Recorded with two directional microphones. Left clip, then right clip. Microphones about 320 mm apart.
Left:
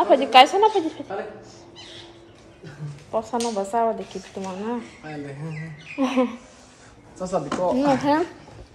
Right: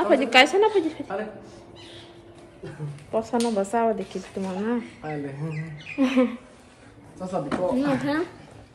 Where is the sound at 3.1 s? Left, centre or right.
Centre.